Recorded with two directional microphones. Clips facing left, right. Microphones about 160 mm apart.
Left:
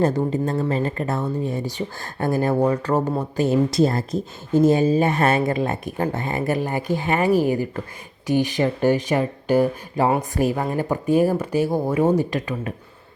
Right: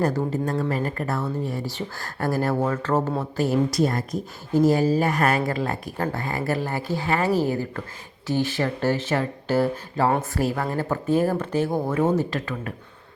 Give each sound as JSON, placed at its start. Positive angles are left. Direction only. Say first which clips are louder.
{"t": 0.0, "sound": "a woman's voice", "louder": "left 3 dB", "side_deg": 20}